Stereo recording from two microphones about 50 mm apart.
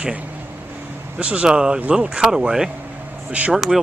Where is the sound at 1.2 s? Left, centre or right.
Right.